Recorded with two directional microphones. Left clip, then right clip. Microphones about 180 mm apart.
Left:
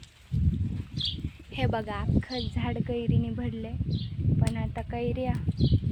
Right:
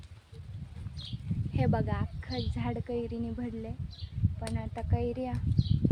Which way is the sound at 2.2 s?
60° left (ahead or behind).